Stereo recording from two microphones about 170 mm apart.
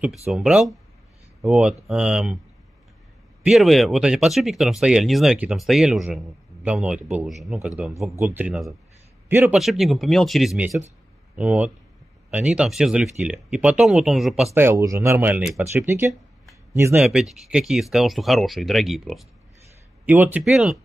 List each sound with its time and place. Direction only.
0.3 s speech: 5° right (ahead or behind)
3.4 s speech: centre (ahead or behind)
9.6 s speech: centre (ahead or behind)
14.5 s speech: 15° right (ahead or behind)
17.0 s speech: centre (ahead or behind)